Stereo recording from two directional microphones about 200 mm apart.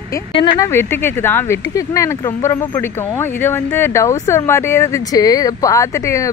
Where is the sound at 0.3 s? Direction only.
25° left (ahead or behind).